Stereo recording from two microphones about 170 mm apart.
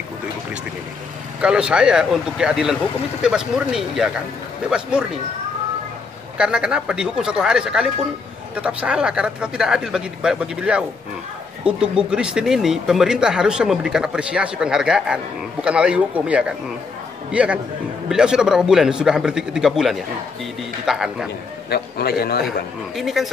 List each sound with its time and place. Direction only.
1.4 s speech: 5° right (ahead or behind)
6.3 s a man's voice: 5° right (ahead or behind)
21.6 s a man's voice: 70° left (ahead or behind)
22.9 s speech: centre (ahead or behind)